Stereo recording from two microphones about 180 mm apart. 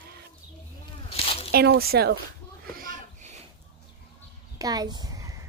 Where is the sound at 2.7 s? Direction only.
50° right (ahead or behind).